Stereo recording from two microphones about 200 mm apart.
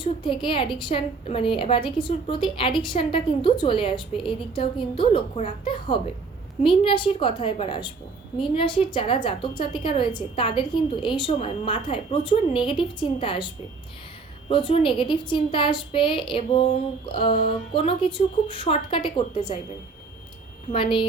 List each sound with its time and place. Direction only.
0.0 s a woman's voice: 25° left (ahead or behind)
14.5 s a woman's voice: 25° left (ahead or behind)